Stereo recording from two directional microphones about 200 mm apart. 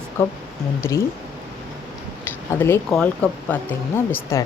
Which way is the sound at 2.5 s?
10° left (ahead or behind).